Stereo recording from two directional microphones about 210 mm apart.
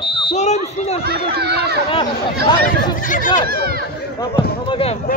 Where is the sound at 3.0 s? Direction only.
40° left (ahead or behind).